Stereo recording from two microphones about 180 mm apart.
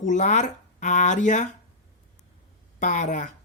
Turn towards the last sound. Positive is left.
turn(degrees=40)  # may be behind; listen again after turning